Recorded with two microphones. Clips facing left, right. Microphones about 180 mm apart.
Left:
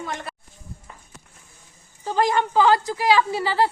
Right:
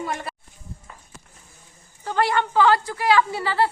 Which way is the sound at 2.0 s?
15° left (ahead or behind).